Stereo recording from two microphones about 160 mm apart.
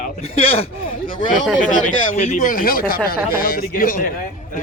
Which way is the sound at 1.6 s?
55° left (ahead or behind).